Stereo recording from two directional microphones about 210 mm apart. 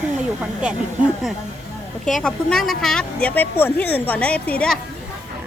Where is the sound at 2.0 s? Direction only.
Centre (ahead or behind).